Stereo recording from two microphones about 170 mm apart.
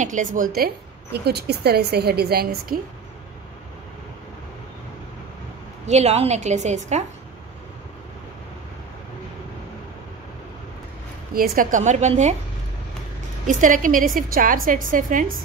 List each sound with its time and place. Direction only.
0.0 s a woman's voice: 45° right (ahead or behind)
1.1 s a woman's voice: 75° right (ahead or behind)
5.9 s a woman's voice: 40° right (ahead or behind)
11.3 s a woman's voice: 55° right (ahead or behind)
13.5 s a woman's voice: 50° right (ahead or behind)